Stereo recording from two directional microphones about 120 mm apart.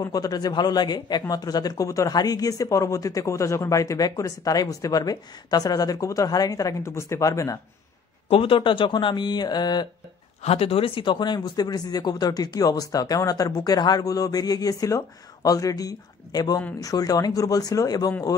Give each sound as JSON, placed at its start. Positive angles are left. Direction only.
{"t": 0.0, "sound": "speech", "side_deg": 30}
{"t": 8.3, "sound": "speech", "side_deg": 45}
{"t": 10.4, "sound": "speech", "side_deg": 60}